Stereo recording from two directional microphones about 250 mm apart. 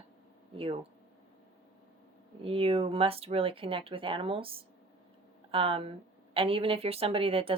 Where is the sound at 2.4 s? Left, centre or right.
Right.